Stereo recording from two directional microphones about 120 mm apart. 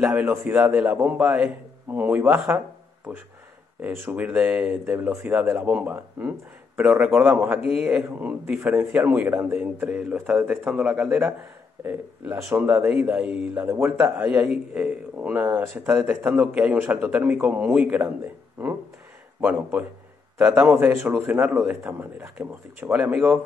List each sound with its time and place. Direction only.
0.0 s speech: 15° right (ahead or behind)
3.8 s a man's voice: 10° right (ahead or behind)